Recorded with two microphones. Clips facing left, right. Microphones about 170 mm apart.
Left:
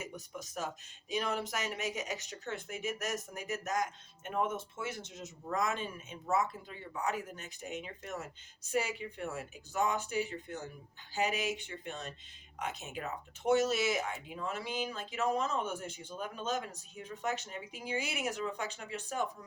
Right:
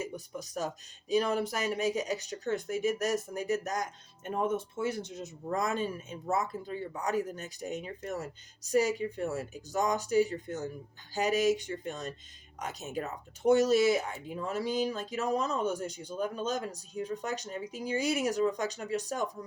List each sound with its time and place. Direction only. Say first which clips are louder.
0.0 s speech: right 6 dB; 35° right (ahead or behind)